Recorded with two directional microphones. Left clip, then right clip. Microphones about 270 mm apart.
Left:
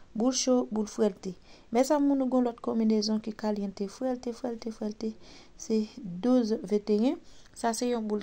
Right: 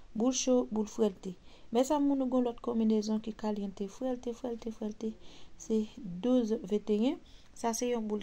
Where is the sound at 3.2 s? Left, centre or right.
Left.